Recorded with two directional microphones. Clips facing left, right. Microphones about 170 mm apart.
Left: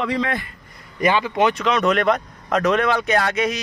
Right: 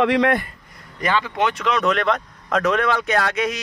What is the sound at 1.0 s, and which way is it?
Speech, 15° left (ahead or behind).